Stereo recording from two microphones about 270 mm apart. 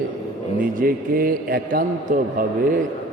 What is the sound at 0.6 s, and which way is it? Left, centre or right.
A man's voice, right.